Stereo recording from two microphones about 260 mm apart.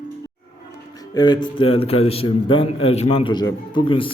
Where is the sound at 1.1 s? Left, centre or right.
Centre.